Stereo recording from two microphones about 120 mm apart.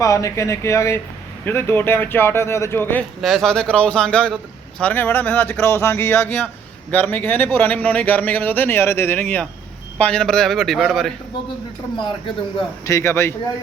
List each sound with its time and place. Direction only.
0.0 s speech: 25° left (ahead or behind)
3.2 s speech: 5° left (ahead or behind)
12.8 s speech: 25° left (ahead or behind)